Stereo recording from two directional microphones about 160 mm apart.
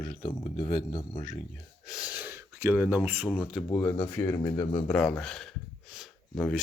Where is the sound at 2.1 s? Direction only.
15° right (ahead or behind).